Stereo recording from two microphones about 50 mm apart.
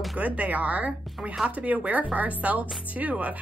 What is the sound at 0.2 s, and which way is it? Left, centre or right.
Speech, right.